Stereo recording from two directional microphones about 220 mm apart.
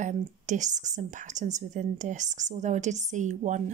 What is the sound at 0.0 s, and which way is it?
A woman's voice, 35° right (ahead or behind).